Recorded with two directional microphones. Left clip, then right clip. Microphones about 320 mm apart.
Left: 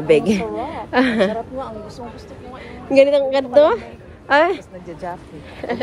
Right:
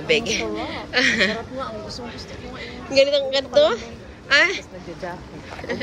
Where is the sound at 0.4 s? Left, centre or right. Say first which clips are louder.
Left 2 dB; centre.